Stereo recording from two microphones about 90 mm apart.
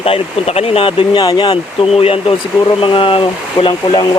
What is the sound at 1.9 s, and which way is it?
Speech, 90° left.